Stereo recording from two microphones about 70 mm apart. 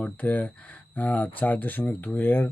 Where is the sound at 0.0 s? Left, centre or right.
Left.